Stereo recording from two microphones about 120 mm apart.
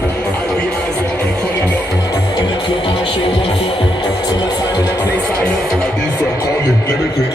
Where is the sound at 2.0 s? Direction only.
30° left (ahead or behind); by 6.0 s 5° left (ahead or behind).